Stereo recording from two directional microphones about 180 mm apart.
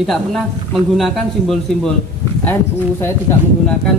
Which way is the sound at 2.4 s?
10° left (ahead or behind).